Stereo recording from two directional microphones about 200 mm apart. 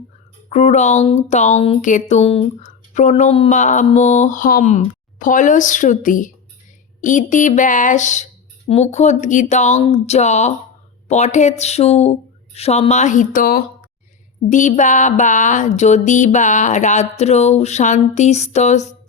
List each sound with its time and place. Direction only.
0.5 s speech: 35° left (ahead or behind)